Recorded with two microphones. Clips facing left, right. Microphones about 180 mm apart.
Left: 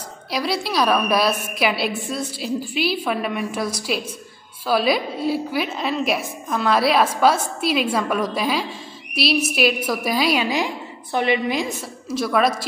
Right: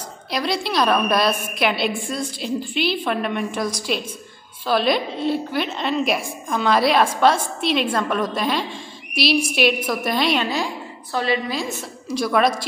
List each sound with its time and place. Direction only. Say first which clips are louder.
0.3 s a woman's voice: even; 5° left (ahead or behind)
12.1 s a woman's voice: right 1 dB; centre (ahead or behind)